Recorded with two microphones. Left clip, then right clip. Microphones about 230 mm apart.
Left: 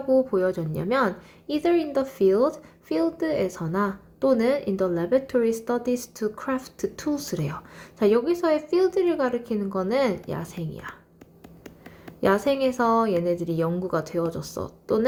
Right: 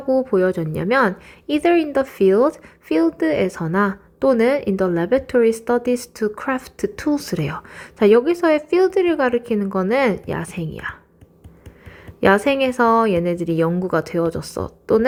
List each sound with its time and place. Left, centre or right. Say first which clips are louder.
0.1 s speech: right 4 dB; right
12.2 s speech: right 6 dB; right